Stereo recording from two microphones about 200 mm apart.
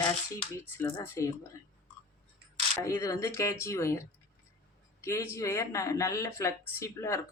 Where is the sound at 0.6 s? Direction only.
10° left (ahead or behind).